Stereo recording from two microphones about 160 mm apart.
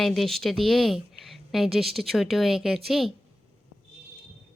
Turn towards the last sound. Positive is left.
turn(degrees=0)  # may be behind; listen again after turning